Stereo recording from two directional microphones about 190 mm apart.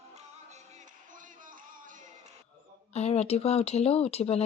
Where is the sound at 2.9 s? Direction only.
35° left (ahead or behind).